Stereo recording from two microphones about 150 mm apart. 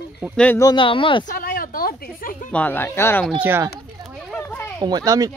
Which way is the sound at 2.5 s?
10° left (ahead or behind).